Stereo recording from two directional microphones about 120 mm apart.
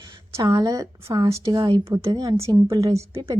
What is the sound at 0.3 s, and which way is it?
A woman's voice, 30° right (ahead or behind).